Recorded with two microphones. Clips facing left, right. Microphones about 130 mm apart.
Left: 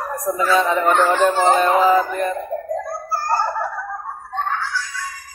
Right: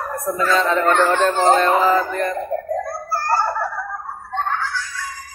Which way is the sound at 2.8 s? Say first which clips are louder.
Right 1 dB; 15° left (ahead or behind).